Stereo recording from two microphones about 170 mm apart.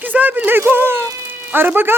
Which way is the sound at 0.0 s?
10° right (ahead or behind).